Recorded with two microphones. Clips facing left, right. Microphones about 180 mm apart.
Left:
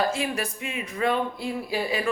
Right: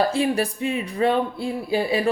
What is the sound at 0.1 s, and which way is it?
Speech, 30° right (ahead or behind).